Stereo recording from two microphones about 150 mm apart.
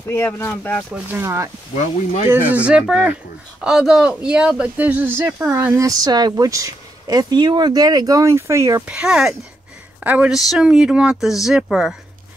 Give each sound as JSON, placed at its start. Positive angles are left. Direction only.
{"t": 0.1, "sound": "speech", "side_deg": 15}
{"t": 0.9, "sound": "speech", "side_deg": -15}
{"t": 8.8, "sound": "speech", "side_deg": -5}